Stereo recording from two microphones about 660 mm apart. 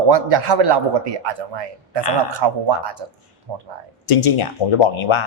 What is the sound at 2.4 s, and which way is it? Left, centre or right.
A man's voice, right.